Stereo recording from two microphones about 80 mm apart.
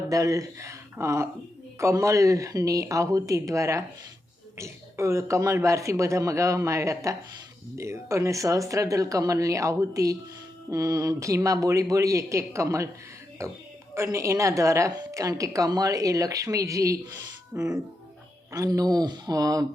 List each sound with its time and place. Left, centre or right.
0.1 s a woman's voice: right
18.5 s a woman's voice: right